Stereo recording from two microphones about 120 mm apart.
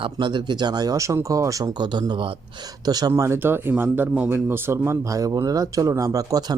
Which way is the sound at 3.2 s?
20° right (ahead or behind).